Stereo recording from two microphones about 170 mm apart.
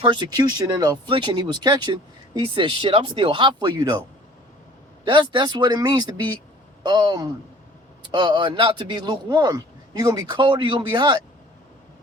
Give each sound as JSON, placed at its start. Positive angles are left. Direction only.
{"t": 0.0, "sound": "speech", "side_deg": -25}
{"t": 5.0, "sound": "speech", "side_deg": -30}